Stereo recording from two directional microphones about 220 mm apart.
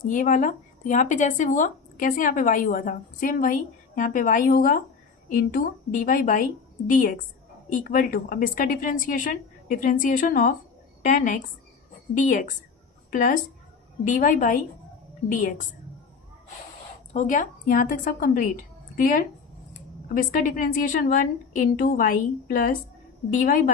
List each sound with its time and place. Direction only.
0.0 s a woman's voice: 35° left (ahead or behind)
17.2 s speech: 35° left (ahead or behind)